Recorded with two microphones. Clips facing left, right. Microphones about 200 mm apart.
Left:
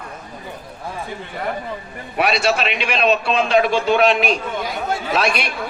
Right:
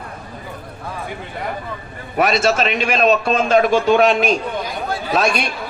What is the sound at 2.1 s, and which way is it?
A man's voice, 45° right (ahead or behind).